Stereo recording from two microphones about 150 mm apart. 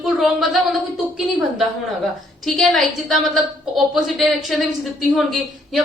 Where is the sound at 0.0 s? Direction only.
Centre (ahead or behind).